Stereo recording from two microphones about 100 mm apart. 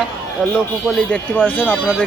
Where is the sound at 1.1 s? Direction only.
20° left (ahead or behind).